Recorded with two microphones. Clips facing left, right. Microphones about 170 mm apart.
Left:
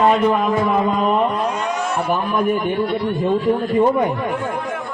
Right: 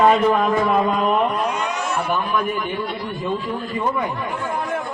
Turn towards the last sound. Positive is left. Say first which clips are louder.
# left 7 dB
turn(degrees=35)  # may be behind; listen again after turning